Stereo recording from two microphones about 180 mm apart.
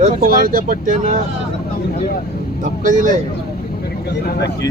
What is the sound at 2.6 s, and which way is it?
Speech, 45° right (ahead or behind).